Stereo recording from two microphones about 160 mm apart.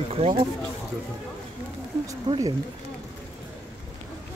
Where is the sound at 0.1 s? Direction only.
35° right (ahead or behind).